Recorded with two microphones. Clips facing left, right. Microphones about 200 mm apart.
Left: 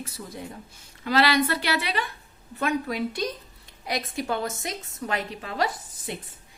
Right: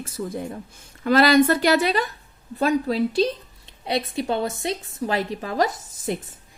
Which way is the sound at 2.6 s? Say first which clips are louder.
Right 6 dB; 30° right (ahead or behind).